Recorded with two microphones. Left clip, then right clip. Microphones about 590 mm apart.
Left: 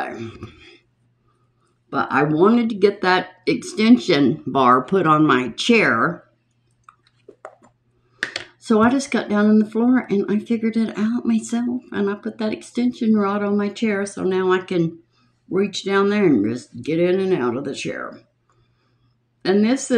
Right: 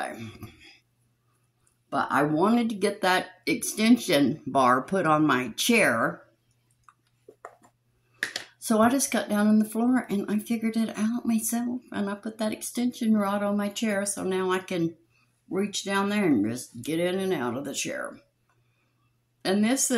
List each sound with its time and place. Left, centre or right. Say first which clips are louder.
0.0 s throat clearing: left 6 dB; right
2.1 s speech: left 8 dB; right
8.6 s speech: left 5 dB; right
19.4 s speech: left 7 dB; right